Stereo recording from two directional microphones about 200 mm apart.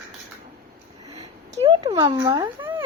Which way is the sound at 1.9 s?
20° right (ahead or behind).